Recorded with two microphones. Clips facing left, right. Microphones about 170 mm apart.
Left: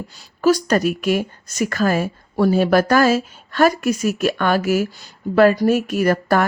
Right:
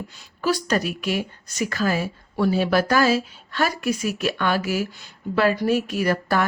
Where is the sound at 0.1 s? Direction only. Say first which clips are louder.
Left 8 dB; 40° left (ahead or behind).